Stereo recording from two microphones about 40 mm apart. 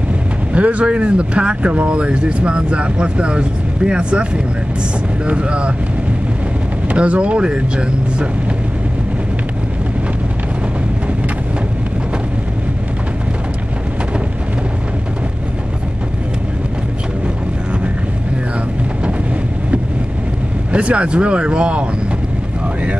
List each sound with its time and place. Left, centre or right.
0.5 s speech: right
7.0 s speech: right
20.7 s speech: right